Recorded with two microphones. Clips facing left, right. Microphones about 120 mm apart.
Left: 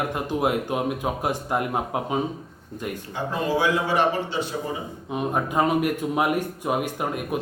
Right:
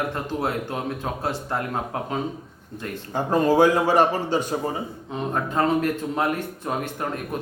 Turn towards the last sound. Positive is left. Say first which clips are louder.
# left 2 dB
turn(degrees=10)  # may be behind; listen again after turning